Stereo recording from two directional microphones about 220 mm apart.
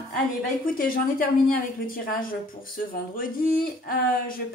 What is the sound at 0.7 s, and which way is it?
A woman's voice, 40° left (ahead or behind).